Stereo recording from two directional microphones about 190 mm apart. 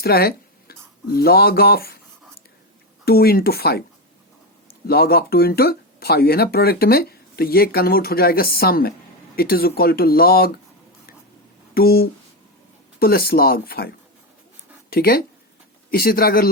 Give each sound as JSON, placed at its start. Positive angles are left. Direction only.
{"t": 0.0, "sound": "speech", "side_deg": 55}
{"t": 3.0, "sound": "speech", "side_deg": 55}
{"t": 4.9, "sound": "speech", "side_deg": 55}
{"t": 11.7, "sound": "speech", "side_deg": 55}